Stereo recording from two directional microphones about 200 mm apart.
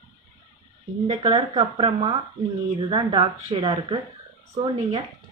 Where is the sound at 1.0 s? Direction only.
30° right (ahead or behind).